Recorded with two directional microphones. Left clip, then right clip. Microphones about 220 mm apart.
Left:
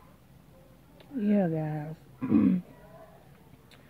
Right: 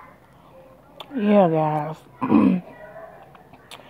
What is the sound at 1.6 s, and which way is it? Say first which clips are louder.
Speech: right 14 dB; 55° right (ahead or behind).